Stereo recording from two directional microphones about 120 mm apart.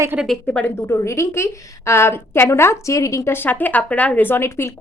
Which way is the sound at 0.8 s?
25° left (ahead or behind).